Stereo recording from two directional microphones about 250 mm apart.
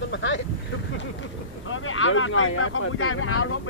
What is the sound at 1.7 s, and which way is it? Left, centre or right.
Speech, left.